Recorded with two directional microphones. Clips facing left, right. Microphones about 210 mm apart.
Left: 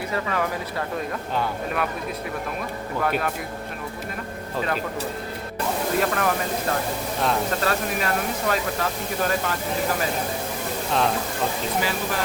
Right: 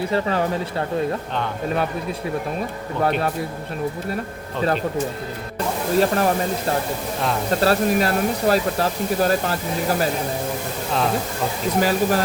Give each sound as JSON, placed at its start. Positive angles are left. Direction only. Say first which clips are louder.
{"t": 0.1, "sound": "speech", "louder": "right 2 dB", "side_deg": -30}
{"t": 3.0, "sound": "speech", "louder": "right 4 dB", "side_deg": -30}
{"t": 6.0, "sound": "speech", "louder": "right 7 dB", "side_deg": -30}
{"t": 7.6, "sound": "speech", "louder": "right 7 dB", "side_deg": -35}
{"t": 11.8, "sound": "speech", "louder": "right 10 dB", "side_deg": -40}